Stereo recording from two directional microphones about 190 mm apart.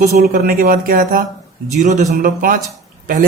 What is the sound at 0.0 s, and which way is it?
Speech, 55° right (ahead or behind).